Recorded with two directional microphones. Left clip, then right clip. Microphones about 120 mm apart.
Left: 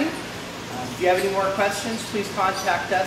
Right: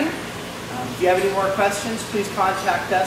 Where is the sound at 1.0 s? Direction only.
Centre (ahead or behind).